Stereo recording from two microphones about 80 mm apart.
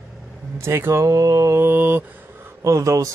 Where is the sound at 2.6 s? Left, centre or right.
Right.